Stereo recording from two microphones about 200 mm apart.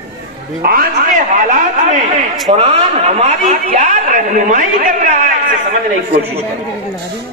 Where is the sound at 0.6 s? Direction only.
45° right (ahead or behind).